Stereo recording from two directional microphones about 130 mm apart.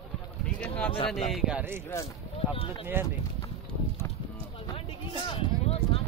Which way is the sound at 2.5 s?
45° left (ahead or behind).